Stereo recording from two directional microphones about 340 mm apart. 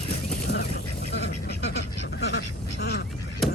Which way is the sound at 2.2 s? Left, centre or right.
Left.